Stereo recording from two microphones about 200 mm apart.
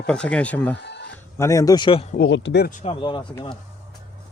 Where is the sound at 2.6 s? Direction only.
30° left (ahead or behind).